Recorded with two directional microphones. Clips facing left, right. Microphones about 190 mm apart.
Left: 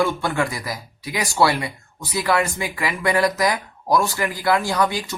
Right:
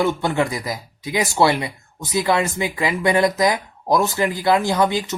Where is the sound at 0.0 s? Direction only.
20° right (ahead or behind).